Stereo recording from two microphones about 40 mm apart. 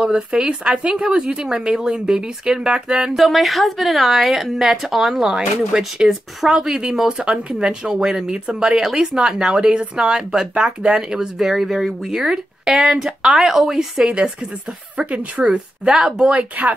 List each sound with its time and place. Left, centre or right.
0.1 s speech: centre
3.2 s a woman's voice: centre
10.5 s speech: right
10.9 s speech: centre
15.0 s speech: right
15.4 s speech: centre
16.6 s speech: right